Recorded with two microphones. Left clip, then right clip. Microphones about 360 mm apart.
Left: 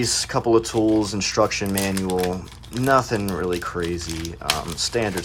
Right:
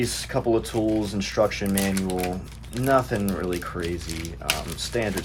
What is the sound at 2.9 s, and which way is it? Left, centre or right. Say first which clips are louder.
Speech: left 2 dB; centre.